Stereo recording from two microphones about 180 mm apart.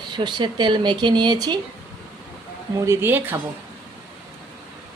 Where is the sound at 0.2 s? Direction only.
25° right (ahead or behind).